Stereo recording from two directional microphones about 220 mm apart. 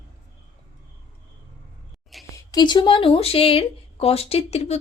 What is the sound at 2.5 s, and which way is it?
Speech, 20° left (ahead or behind).